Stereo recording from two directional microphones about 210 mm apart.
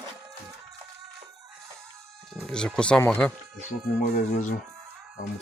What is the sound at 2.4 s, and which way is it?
Speech, 5° left (ahead or behind).